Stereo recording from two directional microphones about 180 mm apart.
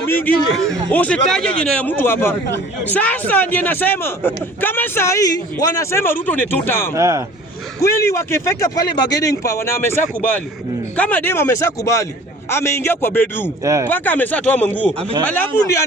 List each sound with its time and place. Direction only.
0.0 s a man's voice: 10° left (ahead or behind)
6.9 s speech: 15° right (ahead or behind)
7.8 s a man's voice: 15° left (ahead or behind)